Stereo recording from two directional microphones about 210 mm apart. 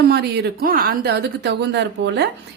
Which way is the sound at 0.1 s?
45° right (ahead or behind).